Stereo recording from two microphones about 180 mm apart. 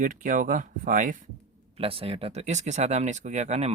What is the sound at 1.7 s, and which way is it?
Speech, 30° right (ahead or behind).